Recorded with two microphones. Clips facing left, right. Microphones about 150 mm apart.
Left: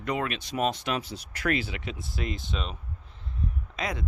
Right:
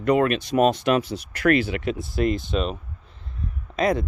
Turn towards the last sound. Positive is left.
turn(degrees=-50)  # may be behind; listen again after turning